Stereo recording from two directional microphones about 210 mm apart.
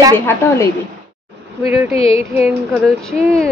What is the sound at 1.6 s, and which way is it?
Speech, 10° right (ahead or behind).